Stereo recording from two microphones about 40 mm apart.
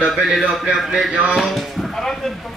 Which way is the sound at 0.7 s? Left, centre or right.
Centre.